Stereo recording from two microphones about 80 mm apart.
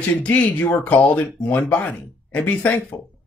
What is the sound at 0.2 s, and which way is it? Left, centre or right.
Speech, centre.